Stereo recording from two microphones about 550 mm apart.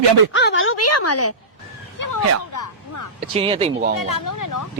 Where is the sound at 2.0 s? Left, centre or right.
Left.